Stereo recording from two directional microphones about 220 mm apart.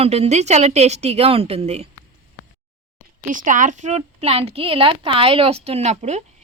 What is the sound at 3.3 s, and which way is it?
A woman's voice, 35° right (ahead or behind).